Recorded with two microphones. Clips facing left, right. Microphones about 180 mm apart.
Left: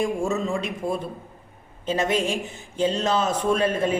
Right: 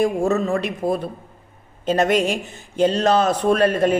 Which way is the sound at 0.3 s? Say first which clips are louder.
Right 5 dB; 60° right (ahead or behind).